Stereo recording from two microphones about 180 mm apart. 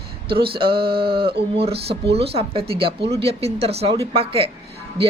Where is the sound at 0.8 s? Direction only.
30° right (ahead or behind).